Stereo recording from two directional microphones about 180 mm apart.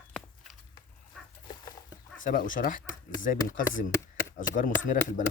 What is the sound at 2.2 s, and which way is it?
Speech, 50° left (ahead or behind).